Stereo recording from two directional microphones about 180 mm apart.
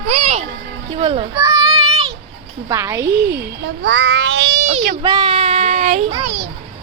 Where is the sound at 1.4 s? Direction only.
20° right (ahead or behind).